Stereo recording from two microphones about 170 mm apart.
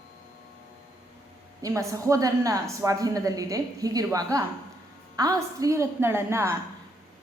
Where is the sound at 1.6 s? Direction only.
20° right (ahead or behind).